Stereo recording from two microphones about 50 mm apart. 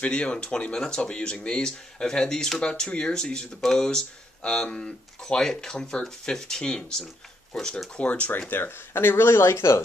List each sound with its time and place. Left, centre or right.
0.0 s speech: left
8.0 s speech: left